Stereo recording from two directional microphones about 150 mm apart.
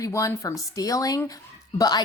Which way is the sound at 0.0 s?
20° left (ahead or behind).